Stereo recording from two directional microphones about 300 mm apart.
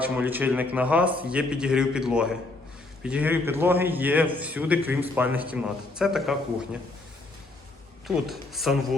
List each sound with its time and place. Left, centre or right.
0.0 s a man's voice: centre
8.0 s a man's voice: centre